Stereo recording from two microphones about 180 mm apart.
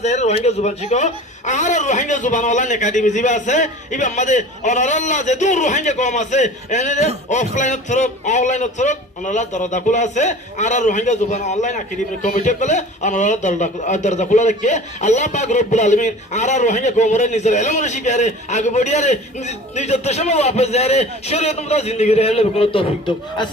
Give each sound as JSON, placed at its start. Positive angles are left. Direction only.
{"t": 0.0, "sound": "a man's voice", "side_deg": 40}